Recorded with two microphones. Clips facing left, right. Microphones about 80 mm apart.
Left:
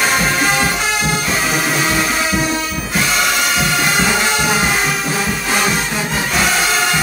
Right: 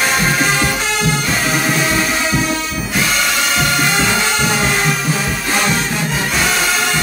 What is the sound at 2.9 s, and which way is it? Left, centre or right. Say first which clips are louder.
Music: left 1 dB; centre.